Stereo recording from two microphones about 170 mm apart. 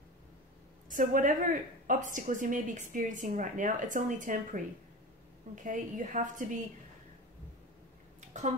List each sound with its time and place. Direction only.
0.8 s a woman's voice: 50° right (ahead or behind)
5.6 s a woman's voice: 50° right (ahead or behind)
8.2 s a sound: 40° right (ahead or behind)